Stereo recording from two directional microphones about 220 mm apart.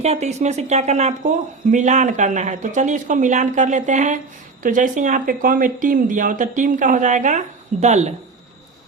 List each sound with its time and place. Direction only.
0.0 s speech: 30° right (ahead or behind)